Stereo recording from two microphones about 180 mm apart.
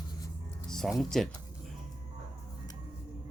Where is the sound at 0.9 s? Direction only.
Centre (ahead or behind).